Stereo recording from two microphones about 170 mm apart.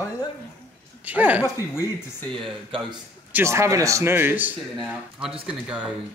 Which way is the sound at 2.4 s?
30° right (ahead or behind).